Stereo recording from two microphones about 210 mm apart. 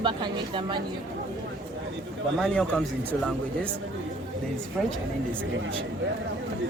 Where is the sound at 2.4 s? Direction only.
5° left (ahead or behind).